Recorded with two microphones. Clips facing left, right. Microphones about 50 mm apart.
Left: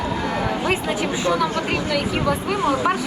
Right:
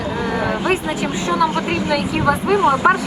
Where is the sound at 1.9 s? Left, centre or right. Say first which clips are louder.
Right 5 dB; centre.